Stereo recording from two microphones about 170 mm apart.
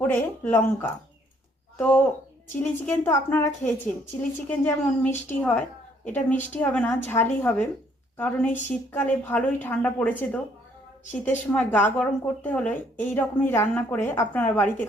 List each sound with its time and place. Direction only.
0.0 s a woman's voice: 10° left (ahead or behind)
11.0 s a woman's voice: 45° left (ahead or behind)
11.5 s a woman's voice: 10° left (ahead or behind)